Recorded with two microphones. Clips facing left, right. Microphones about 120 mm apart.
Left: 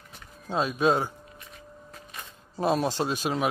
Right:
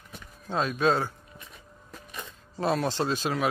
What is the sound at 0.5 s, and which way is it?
Speech, 10° left (ahead or behind).